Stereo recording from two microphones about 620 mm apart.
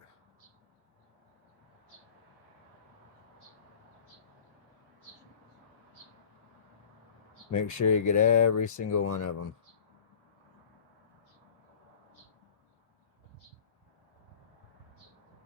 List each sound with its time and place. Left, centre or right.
7.5 s speech: left